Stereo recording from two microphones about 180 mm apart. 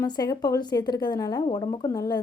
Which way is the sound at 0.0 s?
20° left (ahead or behind).